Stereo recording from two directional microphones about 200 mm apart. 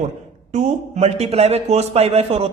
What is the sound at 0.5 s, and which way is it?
A man's voice, 35° right (ahead or behind).